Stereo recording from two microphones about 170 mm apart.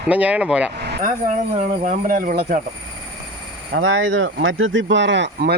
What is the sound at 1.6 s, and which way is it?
Speech, 50° right (ahead or behind).